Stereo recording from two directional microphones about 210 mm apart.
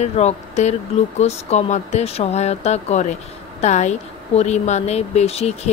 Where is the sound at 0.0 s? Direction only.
30° left (ahead or behind).